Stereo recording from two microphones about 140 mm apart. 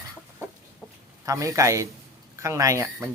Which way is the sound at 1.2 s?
25° right (ahead or behind).